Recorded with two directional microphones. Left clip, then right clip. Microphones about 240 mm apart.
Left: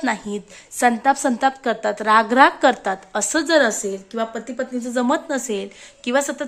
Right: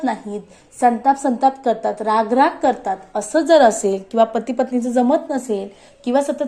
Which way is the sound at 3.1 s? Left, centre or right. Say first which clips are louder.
Right 4 dB; left.